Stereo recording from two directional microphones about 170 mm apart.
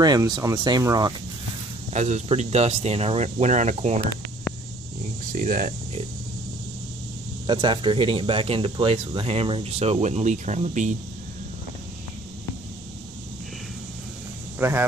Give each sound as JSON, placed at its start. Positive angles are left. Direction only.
{"t": 0.0, "sound": "speech", "side_deg": -25}
{"t": 1.9, "sound": "speech", "side_deg": -40}
{"t": 5.2, "sound": "speech", "side_deg": -55}
{"t": 7.4, "sound": "speech", "side_deg": -30}
{"t": 14.6, "sound": "speech", "side_deg": -15}